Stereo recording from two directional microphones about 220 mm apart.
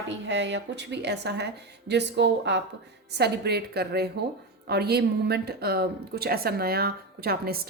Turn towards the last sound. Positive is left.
turn(degrees=-45)  # may be behind; listen again after turning